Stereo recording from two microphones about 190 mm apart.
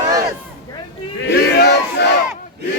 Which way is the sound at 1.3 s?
60° left (ahead or behind).